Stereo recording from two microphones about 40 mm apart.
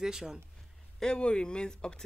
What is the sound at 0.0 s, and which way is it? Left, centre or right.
Speech, centre.